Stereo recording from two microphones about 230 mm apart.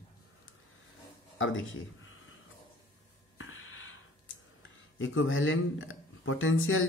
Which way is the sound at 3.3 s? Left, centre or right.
Left.